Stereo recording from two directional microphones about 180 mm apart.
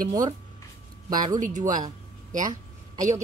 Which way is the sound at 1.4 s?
45° right (ahead or behind).